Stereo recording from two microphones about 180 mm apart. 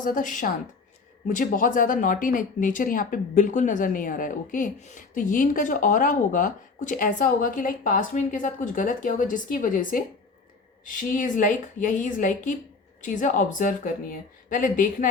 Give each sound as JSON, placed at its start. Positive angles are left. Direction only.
{"t": 0.0, "sound": "speech", "side_deg": 50}